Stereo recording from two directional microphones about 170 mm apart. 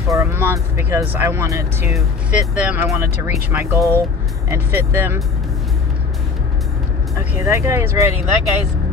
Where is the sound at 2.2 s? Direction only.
5° right (ahead or behind).